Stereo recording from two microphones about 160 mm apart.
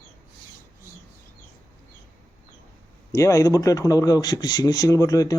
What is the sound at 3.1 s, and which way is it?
Speech, 20° left (ahead or behind).